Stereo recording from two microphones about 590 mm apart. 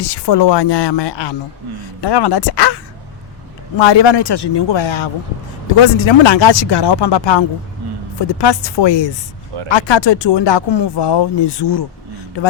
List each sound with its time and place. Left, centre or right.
0.0 s speech: left